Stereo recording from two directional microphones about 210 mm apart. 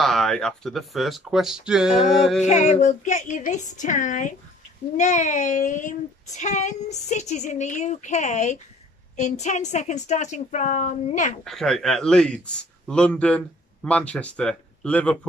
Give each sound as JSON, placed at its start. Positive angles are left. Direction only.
{"t": 0.0, "sound": "speech", "side_deg": 0}
{"t": 2.4, "sound": "speech", "side_deg": 35}
{"t": 11.4, "sound": "speech", "side_deg": 0}